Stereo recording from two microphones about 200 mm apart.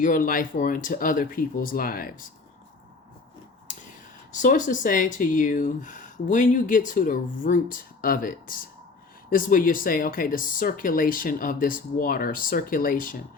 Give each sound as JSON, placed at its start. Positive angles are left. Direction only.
{"t": 0.0, "sound": "speech", "side_deg": 40}
{"t": 4.3, "sound": "speech", "side_deg": 40}